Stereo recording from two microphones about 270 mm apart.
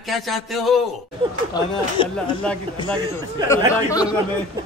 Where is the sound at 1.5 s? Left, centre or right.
Centre.